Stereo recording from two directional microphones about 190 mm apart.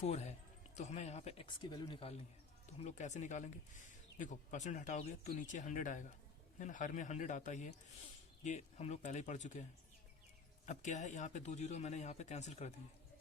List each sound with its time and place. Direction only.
0.0 s speech: 35° left (ahead or behind)
10.7 s speech: 40° left (ahead or behind)